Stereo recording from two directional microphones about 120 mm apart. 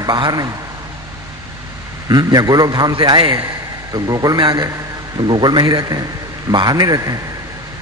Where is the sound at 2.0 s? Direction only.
35° right (ahead or behind).